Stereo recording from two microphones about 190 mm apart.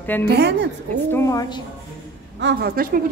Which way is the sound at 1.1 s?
15° left (ahead or behind).